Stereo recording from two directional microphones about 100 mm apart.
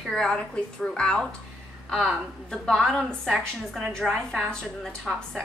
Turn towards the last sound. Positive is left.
turn(degrees=5)  # may be behind; listen again after turning